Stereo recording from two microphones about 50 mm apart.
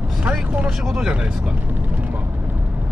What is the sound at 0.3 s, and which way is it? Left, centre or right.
Speech, centre.